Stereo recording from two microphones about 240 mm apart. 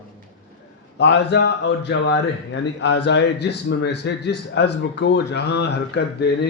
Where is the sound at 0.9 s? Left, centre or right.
Left.